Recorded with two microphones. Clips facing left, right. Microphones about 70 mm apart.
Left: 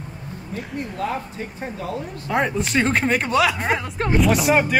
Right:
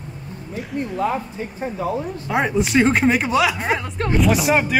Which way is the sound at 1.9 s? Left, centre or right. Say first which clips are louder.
Right 1 dB; centre.